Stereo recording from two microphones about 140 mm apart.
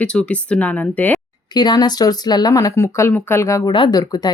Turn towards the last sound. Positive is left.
turn(degrees=30)  # may be behind; listen again after turning